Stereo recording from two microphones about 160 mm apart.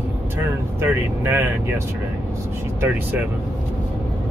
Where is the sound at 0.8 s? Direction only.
15° right (ahead or behind).